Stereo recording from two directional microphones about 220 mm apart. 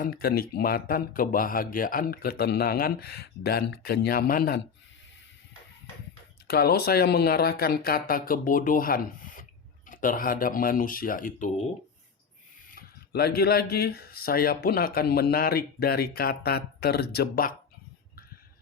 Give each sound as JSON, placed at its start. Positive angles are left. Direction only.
{"t": 0.0, "sound": "speech", "side_deg": 45}
{"t": 6.5, "sound": "speech", "side_deg": 45}
{"t": 12.7, "sound": "speech", "side_deg": 45}